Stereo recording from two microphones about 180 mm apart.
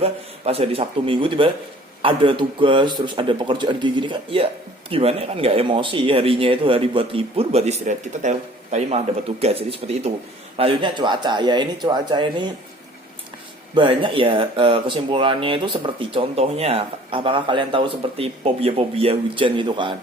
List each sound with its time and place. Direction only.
0.0 s speech: 35° right (ahead or behind)
13.7 s speech: 30° right (ahead or behind)